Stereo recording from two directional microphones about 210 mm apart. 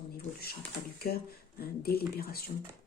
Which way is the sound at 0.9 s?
45° left (ahead or behind).